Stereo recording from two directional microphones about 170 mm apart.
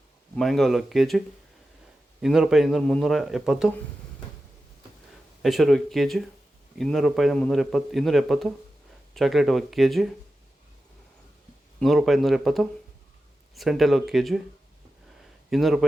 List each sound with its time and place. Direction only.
0.3 s a man's voice: centre (ahead or behind)
2.2 s a man's voice: 5° right (ahead or behind)
5.4 s a man's voice: centre (ahead or behind)
11.8 s a man's voice: centre (ahead or behind)
15.4 s speech: centre (ahead or behind)